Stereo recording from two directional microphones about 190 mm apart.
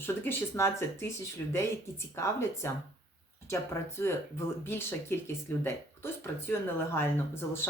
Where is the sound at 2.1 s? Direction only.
15° left (ahead or behind).